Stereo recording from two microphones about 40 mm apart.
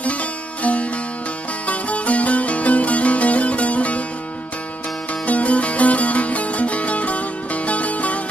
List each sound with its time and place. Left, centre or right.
0.6 s music: left
5.2 s music: left